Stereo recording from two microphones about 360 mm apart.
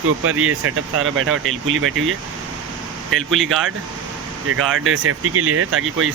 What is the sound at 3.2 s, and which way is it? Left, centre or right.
Speech, centre.